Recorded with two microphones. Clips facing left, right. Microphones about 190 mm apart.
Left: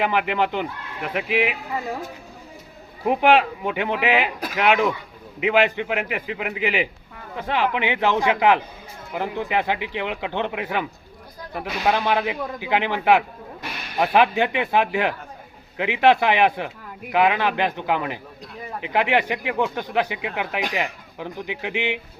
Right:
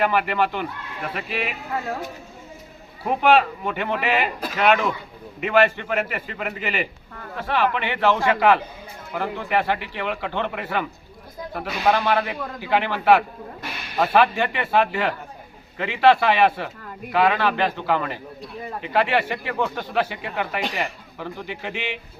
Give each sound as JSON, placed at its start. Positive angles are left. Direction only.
{"t": 0.0, "sound": "speech", "side_deg": 15}
{"t": 3.0, "sound": "speech", "side_deg": 15}